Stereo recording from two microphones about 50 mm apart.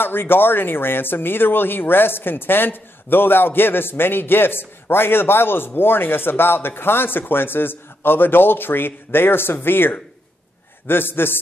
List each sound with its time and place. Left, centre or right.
0.0 s speech: left